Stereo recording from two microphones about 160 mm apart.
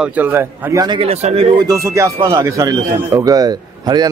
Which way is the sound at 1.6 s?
20° right (ahead or behind).